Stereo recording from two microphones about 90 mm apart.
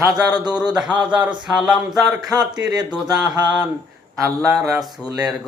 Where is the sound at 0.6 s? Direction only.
10° right (ahead or behind).